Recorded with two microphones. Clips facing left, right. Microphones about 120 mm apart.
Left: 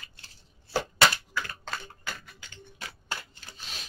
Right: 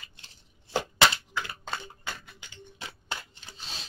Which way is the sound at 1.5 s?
10° right (ahead or behind).